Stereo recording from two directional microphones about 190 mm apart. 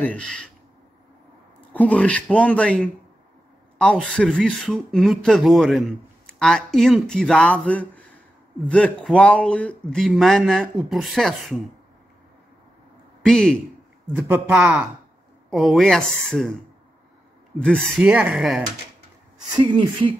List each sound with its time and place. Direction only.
0.0 s speech: 5° left (ahead or behind)
1.7 s speech: 5° left (ahead or behind)
13.2 s speech: 5° left (ahead or behind)
14.1 s a man's voice: 10° right (ahead or behind)
17.6 s speech: 5° left (ahead or behind)
19.5 s a woman's voice: 25° right (ahead or behind)